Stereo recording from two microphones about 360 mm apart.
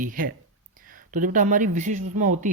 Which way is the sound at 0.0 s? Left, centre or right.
Right.